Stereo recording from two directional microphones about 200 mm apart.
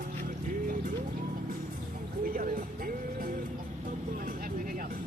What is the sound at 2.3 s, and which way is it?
Music, 45° right (ahead or behind).